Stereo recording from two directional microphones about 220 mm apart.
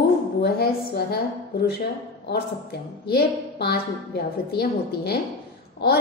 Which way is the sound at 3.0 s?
45° left (ahead or behind).